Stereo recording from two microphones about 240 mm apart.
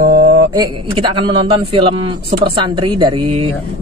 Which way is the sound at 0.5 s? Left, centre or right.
Centre.